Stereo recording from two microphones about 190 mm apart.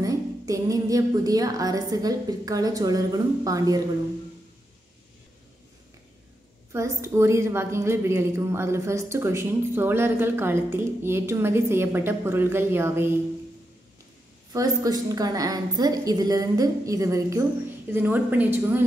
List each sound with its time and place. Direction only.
0.0 s music: 20° right (ahead or behind)
6.7 s a woman's voice: 15° right (ahead or behind)
14.5 s a woman's voice: 20° right (ahead or behind)